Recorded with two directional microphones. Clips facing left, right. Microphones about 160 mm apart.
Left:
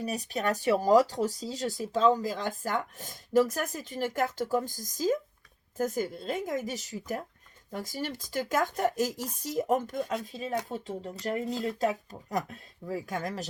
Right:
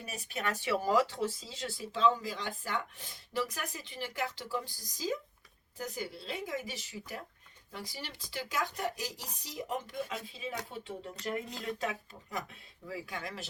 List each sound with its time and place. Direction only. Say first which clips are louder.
0.0 s speech: left 7 dB; 40° left (ahead or behind)